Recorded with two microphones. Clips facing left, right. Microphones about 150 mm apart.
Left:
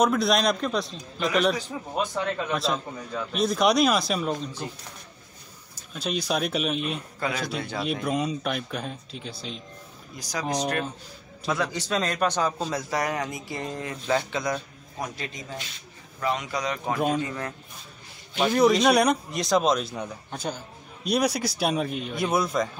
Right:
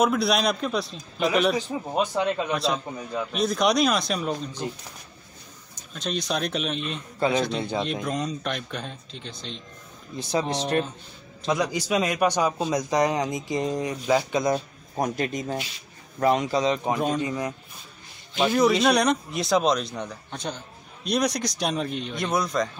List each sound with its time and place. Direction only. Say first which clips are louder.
0.0 s a man's voice: even; 5° right (ahead or behind)
1.7 s a man's voice: right 3 dB; 20° right (ahead or behind)
2.5 s a man's voice: right 1 dB; centre (ahead or behind)
5.9 s a man's voice: left 1 dB; 5° left (ahead or behind)
7.2 s a man's voice: right 9 dB; 30° right (ahead or behind)
7.8 s a man's voice: left 1 dB; 5° left (ahead or behind)
10.1 s a man's voice: right 3 dB; 25° right (ahead or behind)
11.4 s a man's voice: right 3 dB; 15° right (ahead or behind)
15.0 s speech: right 8 dB; 45° right (ahead or behind)
16.2 s a man's voice: right 6 dB; 40° right (ahead or behind); by 17.6 s 15° right (ahead or behind)
18.5 s a man's voice: left 1 dB; centre (ahead or behind)